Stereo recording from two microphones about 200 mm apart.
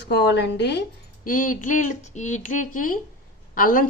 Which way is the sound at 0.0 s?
60° left (ahead or behind).